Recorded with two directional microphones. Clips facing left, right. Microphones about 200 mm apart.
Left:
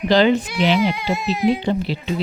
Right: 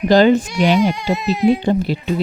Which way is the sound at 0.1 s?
45° right (ahead or behind).